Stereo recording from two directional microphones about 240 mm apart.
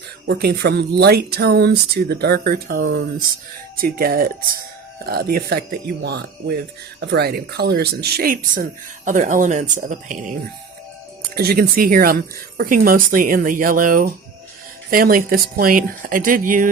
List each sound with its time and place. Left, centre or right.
0.3 s speech: right
11.3 s speech: right